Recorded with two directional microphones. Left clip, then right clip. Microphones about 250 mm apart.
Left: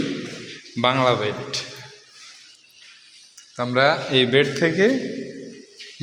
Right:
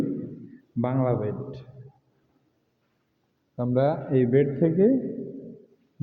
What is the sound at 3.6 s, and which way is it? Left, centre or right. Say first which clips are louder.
Speech: left 6 dB; centre.